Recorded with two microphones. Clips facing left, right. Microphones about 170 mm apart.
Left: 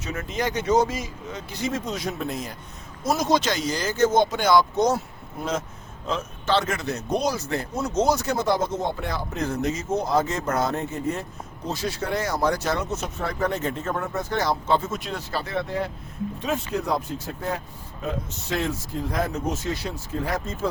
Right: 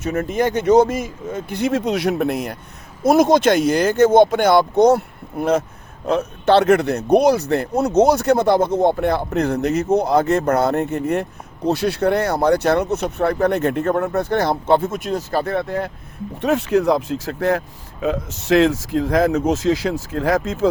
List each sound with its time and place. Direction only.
0.0 s speech: 50° right (ahead or behind); by 2.6 s 65° right (ahead or behind)
3.0 s speech: 55° right (ahead or behind)
16.4 s speech: 75° right (ahead or behind); by 20.7 s 90° right